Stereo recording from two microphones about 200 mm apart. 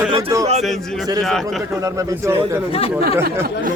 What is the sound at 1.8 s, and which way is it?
Speech, 15° right (ahead or behind).